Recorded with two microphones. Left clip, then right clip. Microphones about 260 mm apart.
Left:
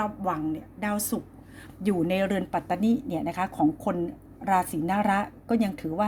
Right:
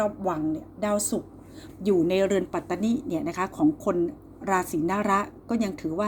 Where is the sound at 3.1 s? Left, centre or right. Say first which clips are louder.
Right 1 dB; left.